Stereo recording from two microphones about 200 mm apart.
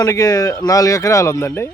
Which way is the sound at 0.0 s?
15° left (ahead or behind).